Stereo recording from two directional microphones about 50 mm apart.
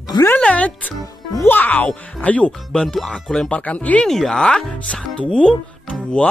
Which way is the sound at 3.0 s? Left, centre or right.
Centre.